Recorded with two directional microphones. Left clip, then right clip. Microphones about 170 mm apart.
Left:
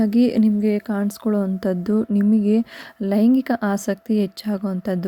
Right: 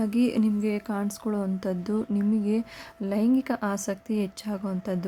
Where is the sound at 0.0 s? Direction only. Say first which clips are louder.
Left 7 dB; 20° left (ahead or behind).